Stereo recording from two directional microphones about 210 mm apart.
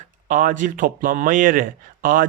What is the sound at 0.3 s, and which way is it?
Speech, 40° right (ahead or behind).